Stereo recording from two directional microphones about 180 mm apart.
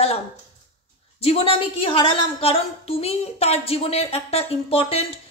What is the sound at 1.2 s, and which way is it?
A woman's voice, 30° left (ahead or behind).